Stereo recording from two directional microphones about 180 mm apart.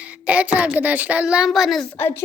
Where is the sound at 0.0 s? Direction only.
5° right (ahead or behind).